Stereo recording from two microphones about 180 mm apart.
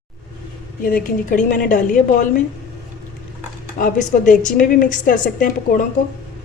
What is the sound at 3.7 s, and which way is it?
A woman's voice, 45° left (ahead or behind).